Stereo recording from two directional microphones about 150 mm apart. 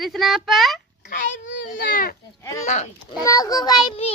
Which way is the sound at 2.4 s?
20° left (ahead or behind).